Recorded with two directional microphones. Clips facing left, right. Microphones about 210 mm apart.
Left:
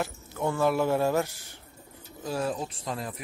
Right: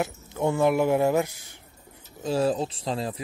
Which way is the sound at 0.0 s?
20° right (ahead or behind).